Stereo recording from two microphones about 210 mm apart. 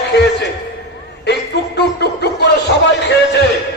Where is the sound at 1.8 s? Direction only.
55° left (ahead or behind).